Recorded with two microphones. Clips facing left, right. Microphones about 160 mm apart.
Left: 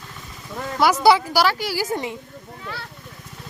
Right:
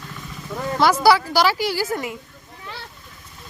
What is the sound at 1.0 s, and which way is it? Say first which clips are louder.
Speech: left 2 dB; 20° left (ahead or behind).